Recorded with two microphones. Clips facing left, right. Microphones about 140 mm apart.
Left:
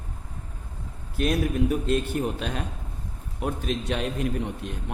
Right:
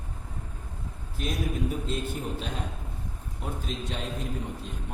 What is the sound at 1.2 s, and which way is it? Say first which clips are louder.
A man's voice: left 7 dB; 70° left (ahead or behind).